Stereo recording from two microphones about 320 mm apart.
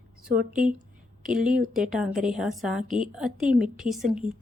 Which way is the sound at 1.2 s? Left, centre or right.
Right.